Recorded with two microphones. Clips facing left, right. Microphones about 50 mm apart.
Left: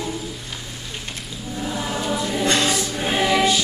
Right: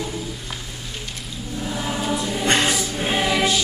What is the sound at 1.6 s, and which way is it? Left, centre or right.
Choir, centre.